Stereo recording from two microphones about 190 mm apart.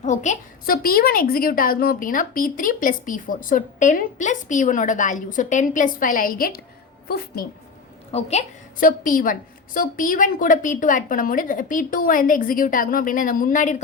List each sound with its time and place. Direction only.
0.0 s a woman's voice: 40° left (ahead or behind)
8.1 s a woman's voice: 35° left (ahead or behind)